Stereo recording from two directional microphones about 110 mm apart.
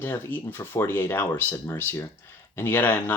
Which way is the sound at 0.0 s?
20° left (ahead or behind).